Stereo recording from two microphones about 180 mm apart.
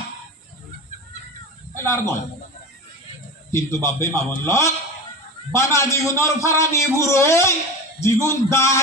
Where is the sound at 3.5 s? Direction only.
15° left (ahead or behind).